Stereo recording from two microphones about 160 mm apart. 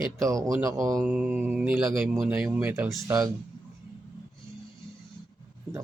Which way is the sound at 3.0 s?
20° right (ahead or behind).